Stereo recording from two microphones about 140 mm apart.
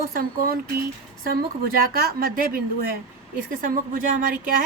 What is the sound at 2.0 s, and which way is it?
A woman's voice, 90° right.